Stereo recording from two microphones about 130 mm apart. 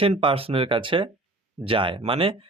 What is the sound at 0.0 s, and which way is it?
Speech, 45° right (ahead or behind).